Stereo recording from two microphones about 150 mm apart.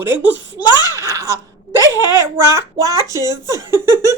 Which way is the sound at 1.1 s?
20° right (ahead or behind).